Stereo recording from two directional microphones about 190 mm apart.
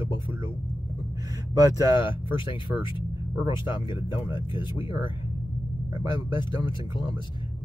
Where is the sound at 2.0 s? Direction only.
25° left (ahead or behind).